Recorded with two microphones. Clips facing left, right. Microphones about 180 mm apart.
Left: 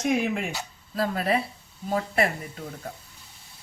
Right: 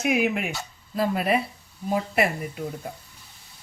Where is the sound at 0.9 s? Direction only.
15° right (ahead or behind).